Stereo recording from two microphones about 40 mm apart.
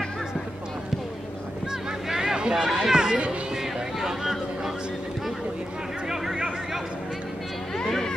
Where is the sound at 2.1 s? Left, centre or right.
Centre.